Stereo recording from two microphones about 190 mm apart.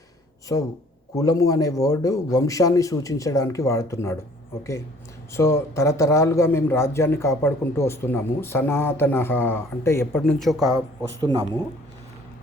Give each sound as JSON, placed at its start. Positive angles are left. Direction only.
{"t": 0.5, "sound": "a man's voice", "side_deg": 15}
{"t": 5.3, "sound": "a man's voice", "side_deg": 15}
{"t": 11.2, "sound": "speech", "side_deg": -20}